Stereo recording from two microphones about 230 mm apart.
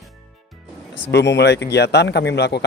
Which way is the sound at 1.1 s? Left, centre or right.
Left.